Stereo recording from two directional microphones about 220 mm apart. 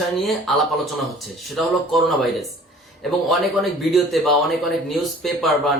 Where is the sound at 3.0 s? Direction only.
Centre (ahead or behind).